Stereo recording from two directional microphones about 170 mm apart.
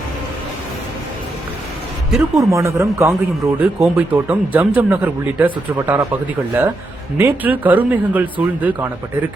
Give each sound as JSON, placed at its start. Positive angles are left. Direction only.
{"t": 2.1, "sound": "speech", "side_deg": 0}
{"t": 2.5, "sound": "speech", "side_deg": -15}
{"t": 7.2, "sound": "speech", "side_deg": -15}